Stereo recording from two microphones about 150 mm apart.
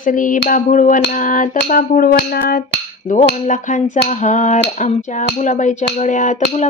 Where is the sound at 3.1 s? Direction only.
55° left (ahead or behind).